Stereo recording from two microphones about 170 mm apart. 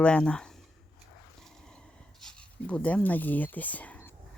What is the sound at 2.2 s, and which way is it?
Speech, 5° left (ahead or behind).